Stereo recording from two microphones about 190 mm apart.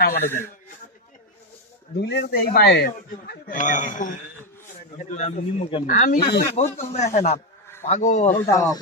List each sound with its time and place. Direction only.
0.2 s a man's voice: 10° left (ahead or behind)
2.0 s speech: 60° left (ahead or behind)
3.5 s speech: 40° left (ahead or behind)
5.9 s speech: 45° left (ahead or behind)
8.5 s a man's voice: 15° left (ahead or behind)